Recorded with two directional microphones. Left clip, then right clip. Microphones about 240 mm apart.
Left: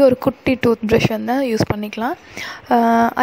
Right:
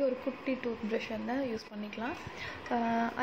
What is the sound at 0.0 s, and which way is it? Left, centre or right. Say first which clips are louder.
A woman's voice: left 18 dB; left.